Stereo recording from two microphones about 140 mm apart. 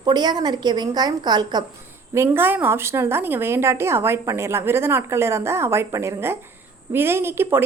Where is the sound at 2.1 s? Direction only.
15° right (ahead or behind).